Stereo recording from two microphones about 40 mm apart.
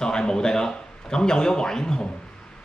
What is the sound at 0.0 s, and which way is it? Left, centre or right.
A man's voice, centre.